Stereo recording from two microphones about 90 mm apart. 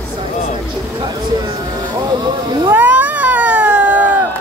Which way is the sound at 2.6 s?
20° right (ahead or behind).